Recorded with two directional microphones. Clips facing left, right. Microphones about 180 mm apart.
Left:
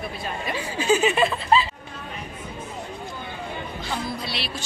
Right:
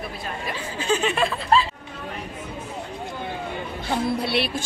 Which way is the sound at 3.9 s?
55° right (ahead or behind).